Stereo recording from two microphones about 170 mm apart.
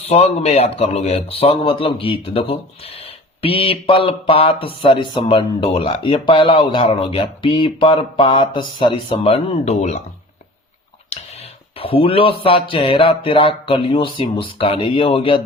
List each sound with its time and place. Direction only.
0.0 s speech: 35° left (ahead or behind)
11.8 s speech: 30° left (ahead or behind)